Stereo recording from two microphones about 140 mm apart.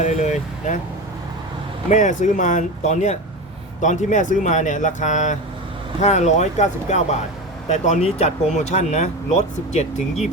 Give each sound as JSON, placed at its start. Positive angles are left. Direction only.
{"t": 0.0, "sound": "speech", "side_deg": 55}
{"t": 1.9, "sound": "speech", "side_deg": 60}